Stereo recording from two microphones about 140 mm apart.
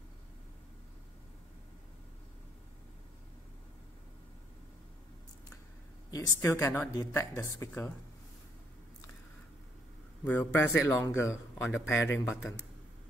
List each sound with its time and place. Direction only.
6.0 s speech: 25° left (ahead or behind)
10.2 s speech: 15° left (ahead or behind)